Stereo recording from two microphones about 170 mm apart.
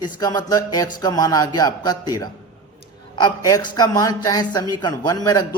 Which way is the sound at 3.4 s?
25° left (ahead or behind).